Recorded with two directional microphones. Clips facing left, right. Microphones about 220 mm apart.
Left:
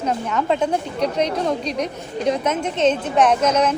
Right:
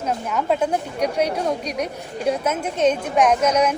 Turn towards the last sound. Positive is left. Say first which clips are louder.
# even
turn(degrees=-10)  # may be behind; listen again after turning